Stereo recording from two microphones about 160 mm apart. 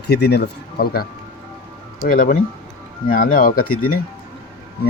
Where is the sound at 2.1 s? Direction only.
60° left (ahead or behind).